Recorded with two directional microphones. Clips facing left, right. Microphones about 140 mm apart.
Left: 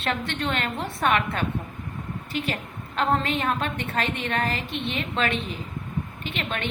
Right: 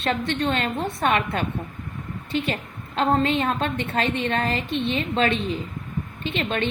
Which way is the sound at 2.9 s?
25° right (ahead or behind).